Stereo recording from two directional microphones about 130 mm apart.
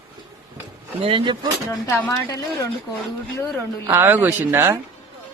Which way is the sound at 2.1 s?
25° left (ahead or behind).